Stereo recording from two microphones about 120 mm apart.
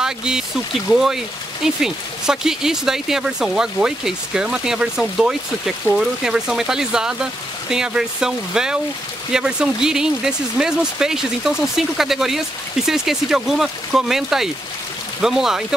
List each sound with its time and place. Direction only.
0.0 s speech: 5° right (ahead or behind)